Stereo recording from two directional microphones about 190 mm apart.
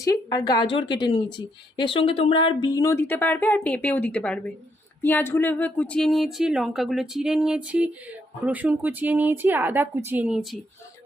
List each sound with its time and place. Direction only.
0.0 s a woman's voice: 20° left (ahead or behind); by 10.6 s 5° right (ahead or behind)